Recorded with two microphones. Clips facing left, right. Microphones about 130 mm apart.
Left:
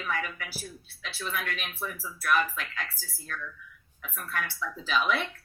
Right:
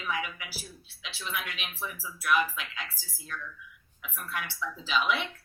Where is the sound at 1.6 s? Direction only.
45° left (ahead or behind).